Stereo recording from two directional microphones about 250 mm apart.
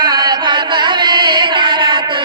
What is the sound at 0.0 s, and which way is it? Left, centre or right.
Chant, centre.